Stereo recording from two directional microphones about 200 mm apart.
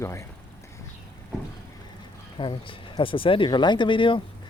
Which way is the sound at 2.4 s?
25° left (ahead or behind).